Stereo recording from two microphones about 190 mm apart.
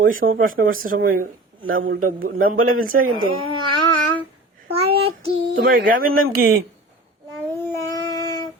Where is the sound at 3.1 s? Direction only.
25° right (ahead or behind).